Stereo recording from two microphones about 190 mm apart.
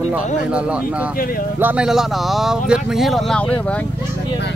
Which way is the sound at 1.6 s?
5° right (ahead or behind).